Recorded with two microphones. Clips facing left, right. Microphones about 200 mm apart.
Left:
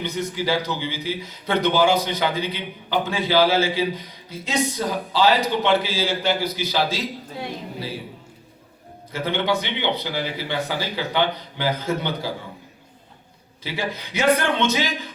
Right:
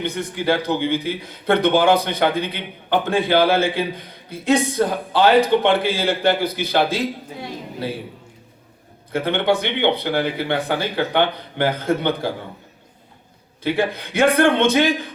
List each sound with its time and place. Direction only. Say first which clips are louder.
0.0 s a man's voice: right 2 dB; 55° right (ahead or behind)
9.1 s a man's voice: right 4 dB; 55° right (ahead or behind)
13.7 s a man's voice: right 8 dB; 55° right (ahead or behind)